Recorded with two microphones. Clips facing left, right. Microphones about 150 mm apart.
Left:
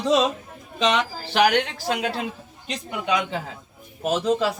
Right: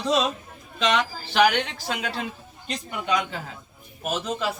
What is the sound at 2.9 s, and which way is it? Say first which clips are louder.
A man's voice: left 2 dB; 20° left (ahead or behind).